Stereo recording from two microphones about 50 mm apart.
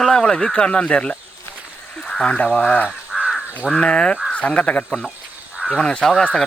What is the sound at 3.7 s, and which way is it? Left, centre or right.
Speech, centre.